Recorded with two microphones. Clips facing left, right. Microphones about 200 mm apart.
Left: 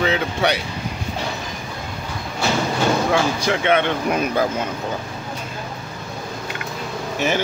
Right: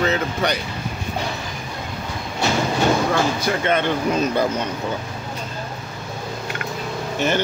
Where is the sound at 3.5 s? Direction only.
70° left (ahead or behind).